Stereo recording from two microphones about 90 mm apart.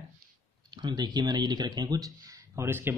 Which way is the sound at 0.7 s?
55° right (ahead or behind).